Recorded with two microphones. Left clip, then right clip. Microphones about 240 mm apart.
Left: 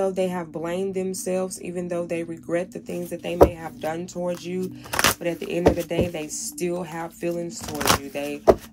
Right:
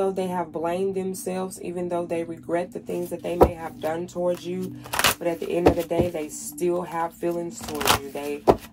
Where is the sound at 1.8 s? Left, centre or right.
Left.